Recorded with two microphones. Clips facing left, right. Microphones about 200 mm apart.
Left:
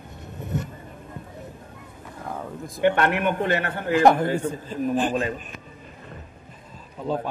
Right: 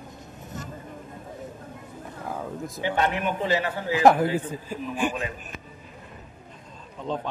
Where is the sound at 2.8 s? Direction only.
60° left (ahead or behind).